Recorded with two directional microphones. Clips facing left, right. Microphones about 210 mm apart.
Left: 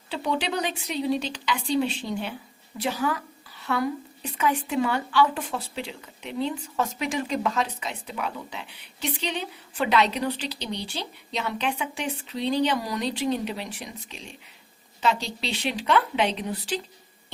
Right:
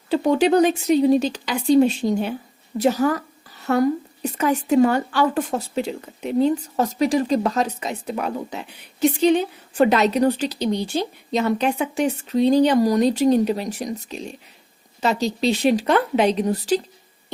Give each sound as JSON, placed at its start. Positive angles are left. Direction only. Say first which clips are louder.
{"t": 0.1, "sound": "a woman's voice", "louder": "right 11 dB", "side_deg": -45}